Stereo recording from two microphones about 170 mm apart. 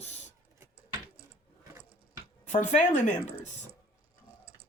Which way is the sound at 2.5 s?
45° left (ahead or behind).